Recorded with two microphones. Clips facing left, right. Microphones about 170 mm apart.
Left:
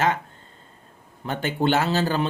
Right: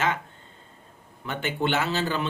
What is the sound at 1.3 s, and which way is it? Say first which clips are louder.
A man's voice: left 4 dB; 35° left (ahead or behind).